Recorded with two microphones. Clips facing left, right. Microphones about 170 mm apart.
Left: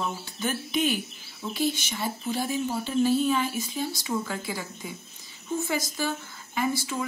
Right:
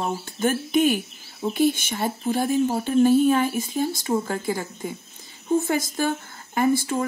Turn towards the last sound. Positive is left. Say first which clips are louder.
# right 7 dB
turn(degrees=-50)  # may be behind; listen again after turning